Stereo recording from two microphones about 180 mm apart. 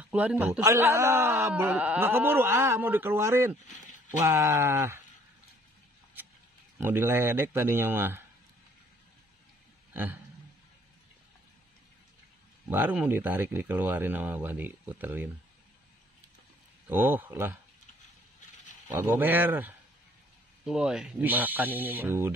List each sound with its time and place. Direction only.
0.0 s speech: 10° right (ahead or behind)
3.6 s a sound: 45° left (ahead or behind)
4.2 s speech: 15° right (ahead or behind)
6.8 s speech: 15° right (ahead or behind)
12.6 s speech: 10° right (ahead or behind)
16.8 s speech: 10° right (ahead or behind)
18.9 s speech: 10° right (ahead or behind)